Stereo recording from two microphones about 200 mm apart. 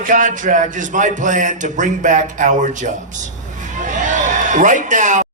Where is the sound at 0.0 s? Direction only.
40° right (ahead or behind).